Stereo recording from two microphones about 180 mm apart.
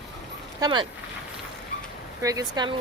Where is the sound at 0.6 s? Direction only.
25° right (ahead or behind).